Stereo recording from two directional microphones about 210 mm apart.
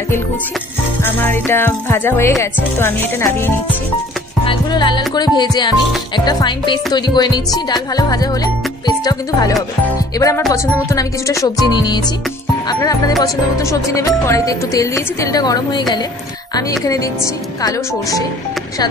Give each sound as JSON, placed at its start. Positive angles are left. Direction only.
{"t": 1.0, "sound": "speech", "side_deg": 10}
{"t": 4.5, "sound": "music", "side_deg": 20}
{"t": 9.8, "sound": "speech", "side_deg": 15}
{"t": 11.6, "sound": "music", "side_deg": 20}
{"t": 12.6, "sound": "speech", "side_deg": 15}